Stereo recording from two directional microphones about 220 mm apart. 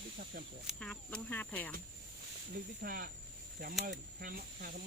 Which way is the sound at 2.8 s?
40° right (ahead or behind).